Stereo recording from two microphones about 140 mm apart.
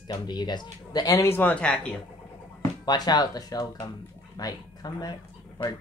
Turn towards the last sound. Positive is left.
turn(degrees=30)  # may be behind; listen again after turning